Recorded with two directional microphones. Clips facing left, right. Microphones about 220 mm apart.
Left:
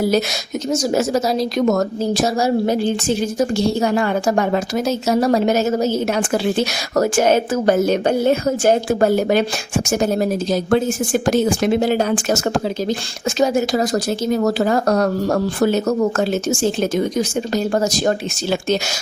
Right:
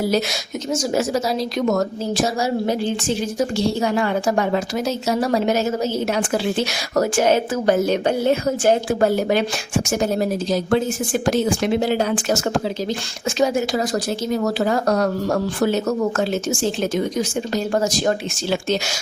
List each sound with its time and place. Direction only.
0.7 s a woman's voice: 40° left (ahead or behind)